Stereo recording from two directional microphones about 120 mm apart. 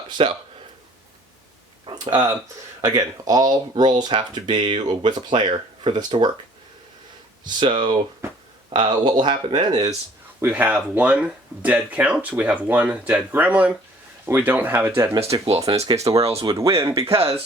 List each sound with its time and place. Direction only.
0.2 s speech: 50° right (ahead or behind)
1.9 s speech: 45° right (ahead or behind)
2.8 s speech: 30° right (ahead or behind)
7.4 s speech: 40° right (ahead or behind)
10.4 s speech: 10° right (ahead or behind); by 17.1 s 30° right (ahead or behind)
17.1 s speech: 50° right (ahead or behind)